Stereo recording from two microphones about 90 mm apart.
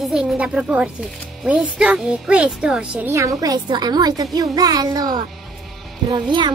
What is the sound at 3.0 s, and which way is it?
A woman's voice, 35° right (ahead or behind).